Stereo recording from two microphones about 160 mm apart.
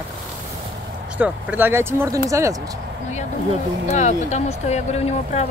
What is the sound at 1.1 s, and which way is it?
Speech, 10° right (ahead or behind).